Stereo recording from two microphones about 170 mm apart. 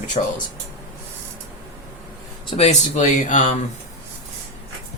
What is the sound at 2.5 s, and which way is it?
Speech, 40° left (ahead or behind).